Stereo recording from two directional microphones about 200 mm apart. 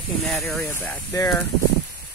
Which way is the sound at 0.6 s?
15° left (ahead or behind).